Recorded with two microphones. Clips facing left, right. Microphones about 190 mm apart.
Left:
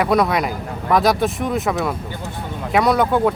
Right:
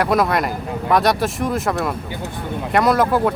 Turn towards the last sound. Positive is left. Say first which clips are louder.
# even
turn(degrees=0)  # may be behind; listen again after turning